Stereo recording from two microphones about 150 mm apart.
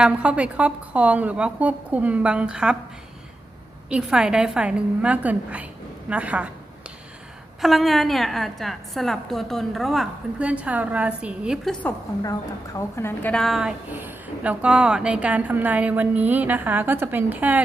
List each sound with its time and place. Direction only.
0.0 s speech: 5° right (ahead or behind)
3.8 s speech: 5° right (ahead or behind)
7.6 s a woman's voice: centre (ahead or behind)
11.7 s a woman's voice: 10° left (ahead or behind)
12.2 s a woman's voice: 25° left (ahead or behind)
13.3 s speech: centre (ahead or behind)